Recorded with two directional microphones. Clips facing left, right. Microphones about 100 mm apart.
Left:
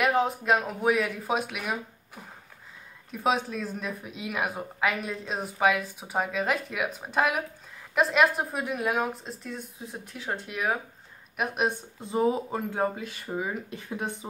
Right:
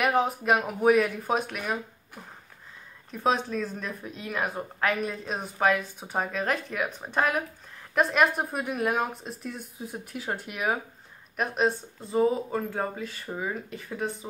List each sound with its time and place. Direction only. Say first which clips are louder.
0.0 s speech: even; 5° right (ahead or behind)
3.1 s speech: right 1 dB; 5° left (ahead or behind)
11.3 s speech: right 2 dB; 15° left (ahead or behind)